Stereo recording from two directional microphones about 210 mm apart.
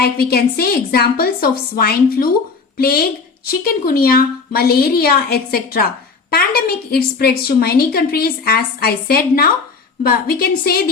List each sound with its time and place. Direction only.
0.0 s a woman's voice: 45° left (ahead or behind)